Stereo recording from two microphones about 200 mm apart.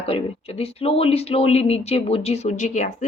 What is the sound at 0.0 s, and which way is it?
Speech, 30° left (ahead or behind).